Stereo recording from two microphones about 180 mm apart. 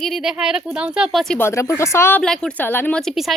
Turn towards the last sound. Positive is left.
turn(degrees=0)  # may be behind; listen again after turning